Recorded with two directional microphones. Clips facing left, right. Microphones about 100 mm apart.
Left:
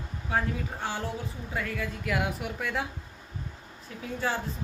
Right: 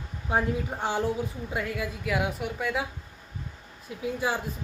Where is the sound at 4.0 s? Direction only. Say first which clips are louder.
Right 3 dB; 10° right (ahead or behind).